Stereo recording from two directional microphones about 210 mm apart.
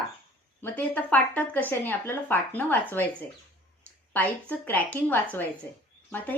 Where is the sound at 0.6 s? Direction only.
10° left (ahead or behind).